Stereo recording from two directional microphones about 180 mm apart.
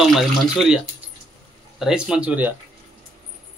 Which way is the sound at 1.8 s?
5° right (ahead or behind).